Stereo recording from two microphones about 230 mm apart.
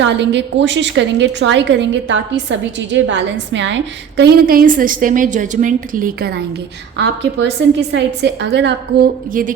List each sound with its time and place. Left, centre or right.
0.0 s a woman's voice: right
4.2 s a woman's voice: right